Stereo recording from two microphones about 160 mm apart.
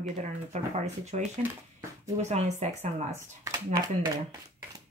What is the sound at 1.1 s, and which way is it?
Speech, 45° right (ahead or behind).